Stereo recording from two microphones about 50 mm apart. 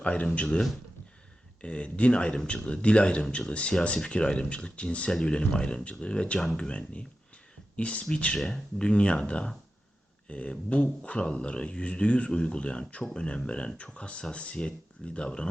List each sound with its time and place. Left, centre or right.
0.0 s speech: left
1.6 s speech: left
8.4 s speech: centre
8.8 s speech: left